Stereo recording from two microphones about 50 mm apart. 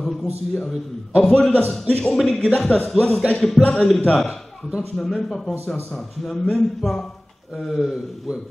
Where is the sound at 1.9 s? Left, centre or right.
Left.